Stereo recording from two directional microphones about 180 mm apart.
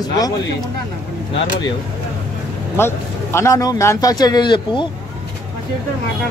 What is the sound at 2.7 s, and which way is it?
Speech, 15° left (ahead or behind).